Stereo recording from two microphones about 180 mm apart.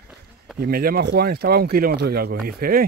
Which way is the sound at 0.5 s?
55° right (ahead or behind).